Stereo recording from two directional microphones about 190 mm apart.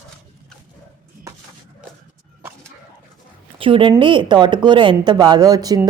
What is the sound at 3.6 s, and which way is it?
A woman's voice, 25° right (ahead or behind).